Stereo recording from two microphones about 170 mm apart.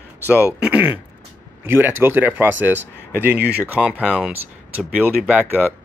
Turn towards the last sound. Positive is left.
turn(degrees=-10)  # may be behind; listen again after turning